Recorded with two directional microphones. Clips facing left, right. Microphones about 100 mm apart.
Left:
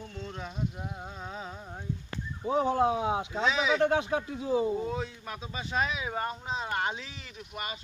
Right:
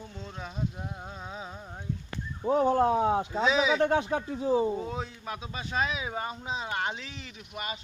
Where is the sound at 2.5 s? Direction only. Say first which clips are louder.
Right 2 dB; 45° right (ahead or behind).